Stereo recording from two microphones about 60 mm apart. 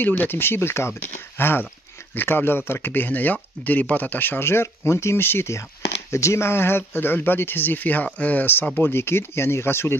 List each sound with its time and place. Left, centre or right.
0.0 s speech: left
6.1 s speech: left